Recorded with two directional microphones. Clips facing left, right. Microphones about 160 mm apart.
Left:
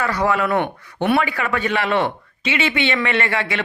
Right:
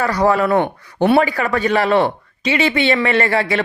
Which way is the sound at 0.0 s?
40° right (ahead or behind).